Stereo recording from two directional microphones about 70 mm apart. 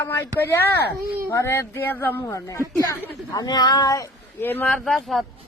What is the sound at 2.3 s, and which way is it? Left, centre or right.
Speech, left.